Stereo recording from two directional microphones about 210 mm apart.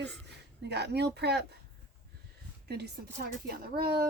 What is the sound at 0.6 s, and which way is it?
Speech, 50° right (ahead or behind).